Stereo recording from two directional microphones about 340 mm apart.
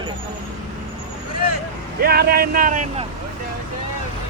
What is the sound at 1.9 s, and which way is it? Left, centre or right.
Speech, right.